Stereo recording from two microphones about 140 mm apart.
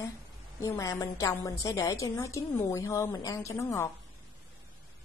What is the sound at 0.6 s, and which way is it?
A woman's voice, 25° left (ahead or behind).